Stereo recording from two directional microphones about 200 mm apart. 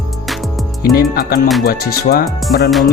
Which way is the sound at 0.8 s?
50° left (ahead or behind).